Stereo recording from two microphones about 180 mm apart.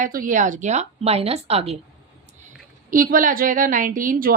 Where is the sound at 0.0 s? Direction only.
50° right (ahead or behind).